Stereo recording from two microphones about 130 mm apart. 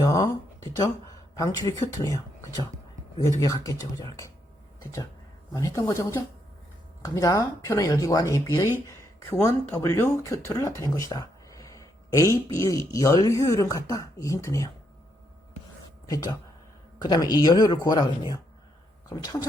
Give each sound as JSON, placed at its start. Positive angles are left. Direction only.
{"t": 0.0, "sound": "a sound", "side_deg": 30}
{"t": 1.8, "sound": "speech", "side_deg": 25}
{"t": 17.0, "sound": "speech", "side_deg": 30}